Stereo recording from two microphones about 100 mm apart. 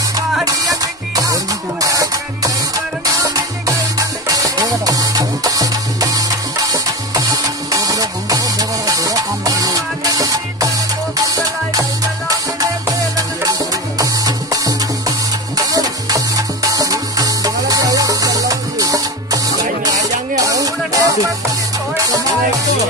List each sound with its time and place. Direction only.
0.5 s music: 35° right (ahead or behind)